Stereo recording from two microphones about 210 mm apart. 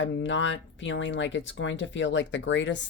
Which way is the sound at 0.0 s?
60° left (ahead or behind).